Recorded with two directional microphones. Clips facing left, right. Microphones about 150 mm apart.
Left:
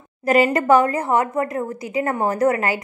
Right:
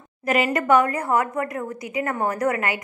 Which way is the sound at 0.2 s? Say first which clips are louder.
Left 5 dB; 35° left (ahead or behind).